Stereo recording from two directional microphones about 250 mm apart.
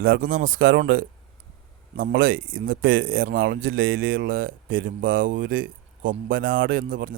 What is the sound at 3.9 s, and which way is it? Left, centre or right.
Speech, right.